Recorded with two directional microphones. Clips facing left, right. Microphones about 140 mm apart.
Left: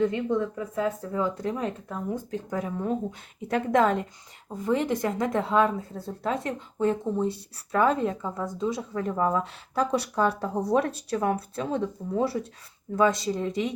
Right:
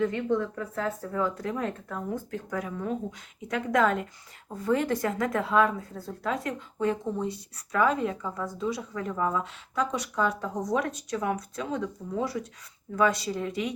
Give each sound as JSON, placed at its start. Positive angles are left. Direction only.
{"t": 0.0, "sound": "a woman's voice", "side_deg": 20}